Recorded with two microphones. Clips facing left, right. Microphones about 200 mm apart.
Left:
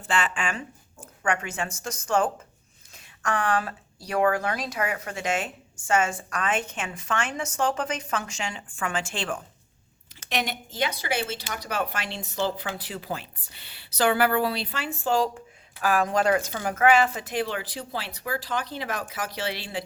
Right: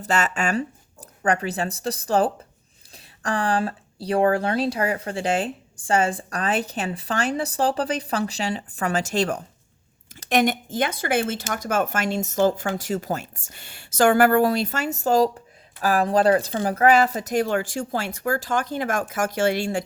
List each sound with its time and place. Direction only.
0.0 s speech: 40° right (ahead or behind)